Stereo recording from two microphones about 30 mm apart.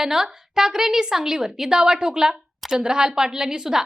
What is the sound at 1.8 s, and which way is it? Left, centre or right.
A woman's voice, right.